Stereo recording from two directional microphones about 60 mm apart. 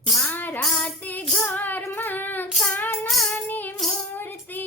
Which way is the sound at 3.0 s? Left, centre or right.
Centre.